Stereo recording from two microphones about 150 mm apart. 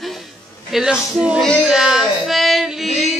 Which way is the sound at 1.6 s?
5° right (ahead or behind).